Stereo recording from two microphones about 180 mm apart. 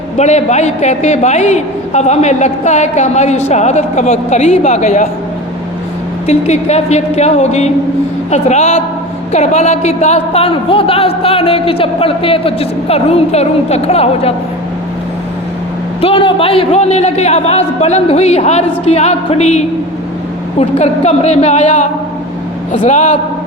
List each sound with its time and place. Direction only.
0.2 s a woman's voice: 40° left (ahead or behind)
6.2 s a woman's voice: 35° left (ahead or behind)
16.0 s a woman's voice: 30° left (ahead or behind)